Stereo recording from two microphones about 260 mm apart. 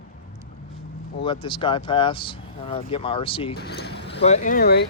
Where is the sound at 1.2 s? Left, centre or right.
Centre.